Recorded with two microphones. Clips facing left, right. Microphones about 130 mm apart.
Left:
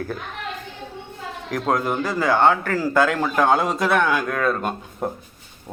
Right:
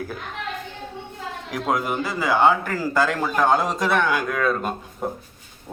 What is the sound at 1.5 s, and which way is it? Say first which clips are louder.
A man's voice: left 2 dB; 5° right (ahead or behind).